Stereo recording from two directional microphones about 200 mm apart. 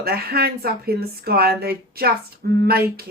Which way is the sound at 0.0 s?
50° right (ahead or behind).